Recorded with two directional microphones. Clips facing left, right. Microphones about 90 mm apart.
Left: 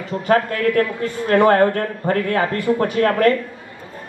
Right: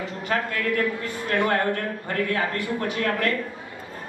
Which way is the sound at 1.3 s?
50° left (ahead or behind).